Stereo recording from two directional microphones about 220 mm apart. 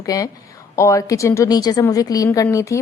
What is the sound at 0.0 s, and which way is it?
A woman's voice, 15° left (ahead or behind).